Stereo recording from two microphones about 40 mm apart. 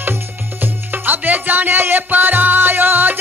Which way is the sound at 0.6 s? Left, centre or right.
Right.